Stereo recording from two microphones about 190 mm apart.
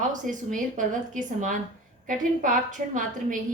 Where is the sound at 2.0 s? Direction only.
45° right (ahead or behind).